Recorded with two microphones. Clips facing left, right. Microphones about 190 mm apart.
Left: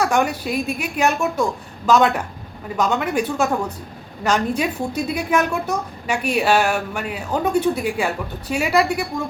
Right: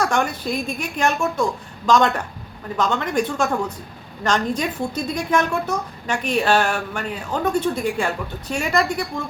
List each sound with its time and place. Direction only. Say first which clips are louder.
0.0 s a woman's voice: left 2 dB; 10° left (ahead or behind)